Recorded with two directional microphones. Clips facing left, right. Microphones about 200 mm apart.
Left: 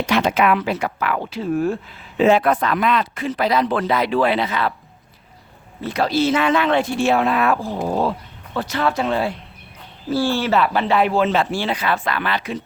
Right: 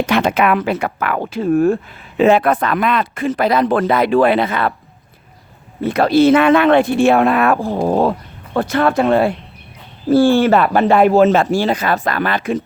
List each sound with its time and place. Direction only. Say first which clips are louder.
0.0 s speech: right 3 dB; 55° right (ahead or behind)
5.8 s speech: right 7 dB; 55° right (ahead or behind)